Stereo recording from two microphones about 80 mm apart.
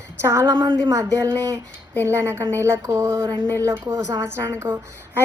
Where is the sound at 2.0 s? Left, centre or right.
Right.